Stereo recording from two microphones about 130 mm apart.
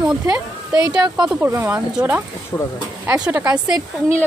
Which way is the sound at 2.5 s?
20° left (ahead or behind).